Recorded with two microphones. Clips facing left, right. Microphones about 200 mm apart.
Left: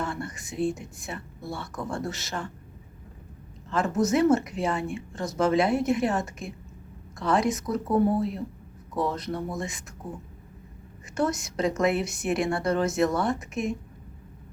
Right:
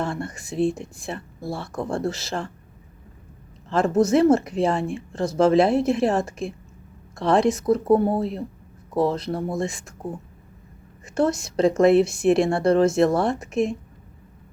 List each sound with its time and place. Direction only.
0.0 s speech: 30° right (ahead or behind)
3.7 s speech: 30° right (ahead or behind)
11.1 s speech: 30° right (ahead or behind)